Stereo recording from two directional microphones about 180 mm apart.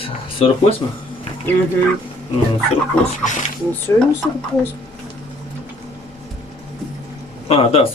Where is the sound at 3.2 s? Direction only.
45° left (ahead or behind).